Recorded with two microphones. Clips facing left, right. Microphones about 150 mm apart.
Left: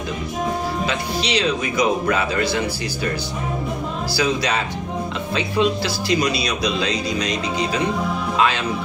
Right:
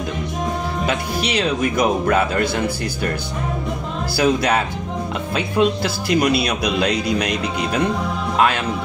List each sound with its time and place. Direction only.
0.8 s speech: 55° right (ahead or behind)
4.2 s a man's voice: 55° right (ahead or behind)